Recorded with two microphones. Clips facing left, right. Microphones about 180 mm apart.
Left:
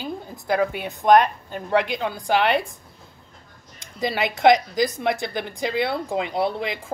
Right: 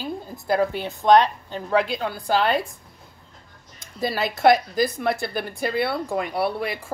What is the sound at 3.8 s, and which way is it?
Speech, 20° left (ahead or behind).